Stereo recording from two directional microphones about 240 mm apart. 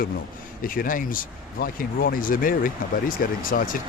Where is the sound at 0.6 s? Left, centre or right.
Left.